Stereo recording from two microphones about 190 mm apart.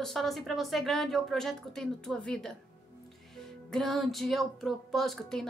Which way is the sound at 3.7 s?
Centre (ahead or behind).